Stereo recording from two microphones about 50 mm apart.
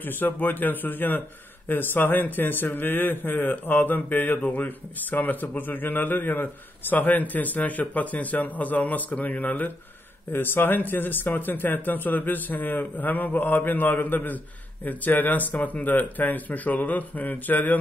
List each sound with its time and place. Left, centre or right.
0.0 s a man's voice: left
10.3 s a man's voice: left